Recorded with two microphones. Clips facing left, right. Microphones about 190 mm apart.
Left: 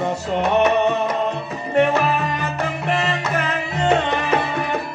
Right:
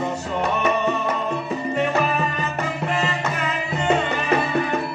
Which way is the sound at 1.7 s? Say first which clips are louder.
Left 6 dB; 75° left (ahead or behind).